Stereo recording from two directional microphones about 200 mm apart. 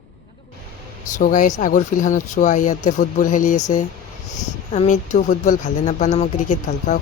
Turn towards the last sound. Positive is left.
turn(degrees=40)  # may be behind; listen again after turning